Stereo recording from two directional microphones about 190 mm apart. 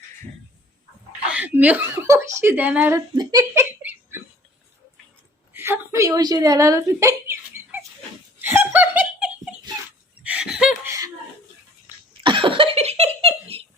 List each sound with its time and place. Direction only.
1.3 s speech: 5° right (ahead or behind)
3.2 s chuckle: 15° right (ahead or behind)
5.5 s a woman's voice: 10° right (ahead or behind)
8.4 s laughter: 10° right (ahead or behind)
12.2 s cough: 25° right (ahead or behind)